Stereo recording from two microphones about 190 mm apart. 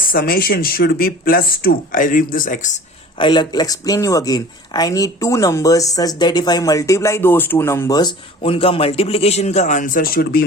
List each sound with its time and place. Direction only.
0.1 s speech: 50° left (ahead or behind)
3.2 s a man's voice: 25° left (ahead or behind); by 10.4 s 50° left (ahead or behind)